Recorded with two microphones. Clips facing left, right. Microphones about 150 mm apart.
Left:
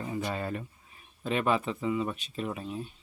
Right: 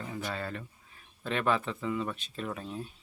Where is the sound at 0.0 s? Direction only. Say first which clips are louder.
Left 3 dB; 20° left (ahead or behind).